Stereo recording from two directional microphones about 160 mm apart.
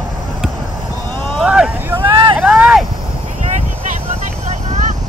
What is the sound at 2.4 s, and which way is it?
Vehicle, 5° right (ahead or behind).